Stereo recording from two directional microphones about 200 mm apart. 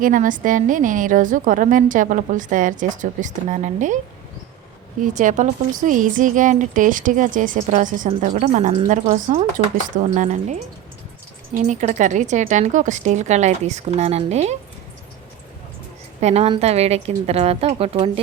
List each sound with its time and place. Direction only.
0.0 s a woman's voice: 40° right (ahead or behind)
16.2 s a woman's voice: 30° right (ahead or behind)